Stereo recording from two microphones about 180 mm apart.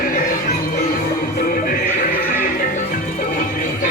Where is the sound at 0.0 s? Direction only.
50° left (ahead or behind).